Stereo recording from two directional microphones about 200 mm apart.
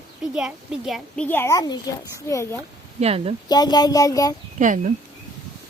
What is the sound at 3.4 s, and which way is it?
Speech, 20° left (ahead or behind).